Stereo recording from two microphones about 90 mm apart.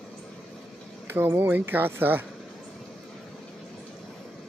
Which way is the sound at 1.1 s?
25° right (ahead or behind).